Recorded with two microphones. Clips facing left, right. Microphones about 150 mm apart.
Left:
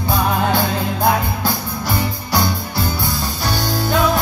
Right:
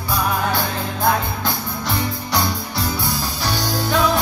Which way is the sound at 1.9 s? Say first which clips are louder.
Left 2 dB; centre (ahead or behind).